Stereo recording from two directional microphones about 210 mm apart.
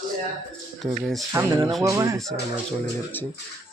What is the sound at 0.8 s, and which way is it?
Speech, centre (ahead or behind).